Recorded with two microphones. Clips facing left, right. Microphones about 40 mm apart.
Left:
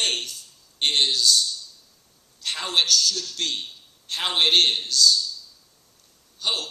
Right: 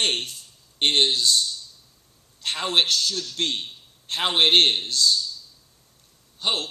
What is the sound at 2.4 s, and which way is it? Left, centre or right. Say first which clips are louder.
A man's voice: right 1 dB; right.